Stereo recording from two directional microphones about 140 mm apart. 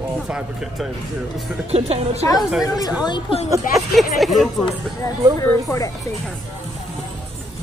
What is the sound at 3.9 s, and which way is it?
Speech, centre (ahead or behind).